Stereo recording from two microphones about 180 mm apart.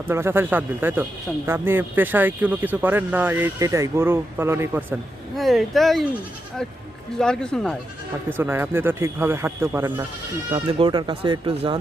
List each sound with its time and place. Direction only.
0.1 s speech: 15° right (ahead or behind)
5.4 s speech: centre (ahead or behind)
7.2 s speech: 5° left (ahead or behind)
8.3 s speech: 10° right (ahead or behind)
10.8 s speech: 25° right (ahead or behind)